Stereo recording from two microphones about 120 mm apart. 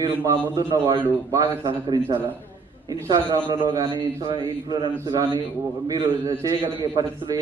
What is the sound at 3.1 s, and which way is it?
A man's voice, 35° right (ahead or behind).